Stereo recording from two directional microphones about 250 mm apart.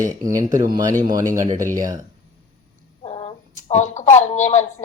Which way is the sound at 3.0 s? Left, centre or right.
Left.